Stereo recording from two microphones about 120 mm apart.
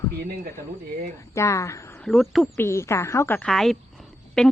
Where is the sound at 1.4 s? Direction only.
25° left (ahead or behind).